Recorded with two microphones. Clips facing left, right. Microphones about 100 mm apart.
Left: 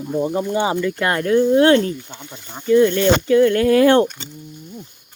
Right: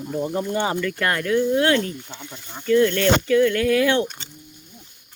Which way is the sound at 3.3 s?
35° left (ahead or behind).